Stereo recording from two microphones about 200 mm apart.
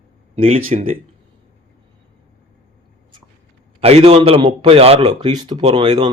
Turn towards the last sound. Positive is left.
turn(degrees=-20)  # may be behind; listen again after turning